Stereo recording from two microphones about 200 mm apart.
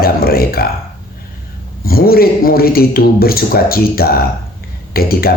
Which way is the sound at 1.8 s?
50° left (ahead or behind).